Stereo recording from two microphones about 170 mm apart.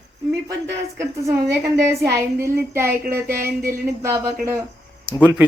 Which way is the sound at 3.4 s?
60° right (ahead or behind).